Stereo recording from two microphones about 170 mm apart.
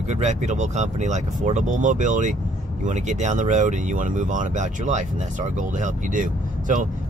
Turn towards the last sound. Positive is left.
turn(degrees=-50)  # may be behind; listen again after turning